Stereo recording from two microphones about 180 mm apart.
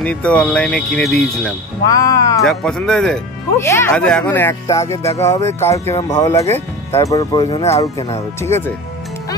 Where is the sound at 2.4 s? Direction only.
Centre (ahead or behind); by 7.8 s 30° left (ahead or behind).